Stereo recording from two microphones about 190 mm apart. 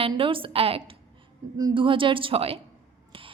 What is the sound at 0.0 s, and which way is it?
A woman's voice, 30° right (ahead or behind).